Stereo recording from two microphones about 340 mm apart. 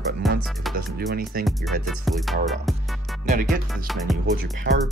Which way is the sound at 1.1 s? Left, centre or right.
Right.